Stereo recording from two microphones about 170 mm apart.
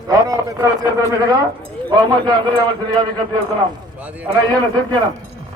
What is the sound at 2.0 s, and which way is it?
Speech, 25° right (ahead or behind).